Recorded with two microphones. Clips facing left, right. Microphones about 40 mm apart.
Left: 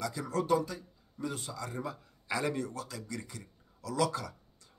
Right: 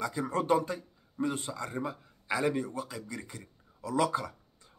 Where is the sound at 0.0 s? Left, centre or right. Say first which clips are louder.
Right 2 dB; right.